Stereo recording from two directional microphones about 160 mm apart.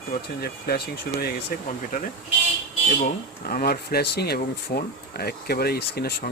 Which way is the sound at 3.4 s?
70° left (ahead or behind).